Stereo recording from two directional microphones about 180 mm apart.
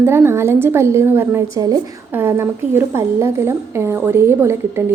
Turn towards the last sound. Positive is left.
turn(degrees=-15)  # may be behind; listen again after turning